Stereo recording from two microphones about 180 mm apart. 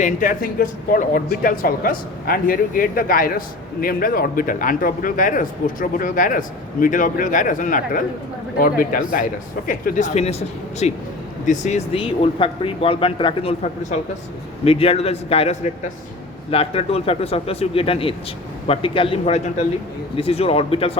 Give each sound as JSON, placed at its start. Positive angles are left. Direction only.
{"t": 0.0, "sound": "a man's voice", "side_deg": 50}